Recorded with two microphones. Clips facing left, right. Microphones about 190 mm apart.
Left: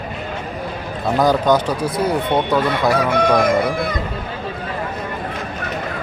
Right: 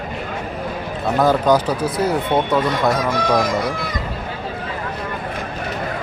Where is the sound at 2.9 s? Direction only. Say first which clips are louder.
Left 3 dB; 55° left (ahead or behind).